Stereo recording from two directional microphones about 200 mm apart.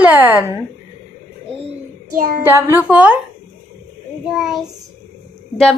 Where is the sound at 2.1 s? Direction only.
50° right (ahead or behind).